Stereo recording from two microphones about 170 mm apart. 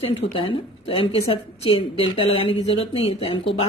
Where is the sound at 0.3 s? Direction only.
30° left (ahead or behind).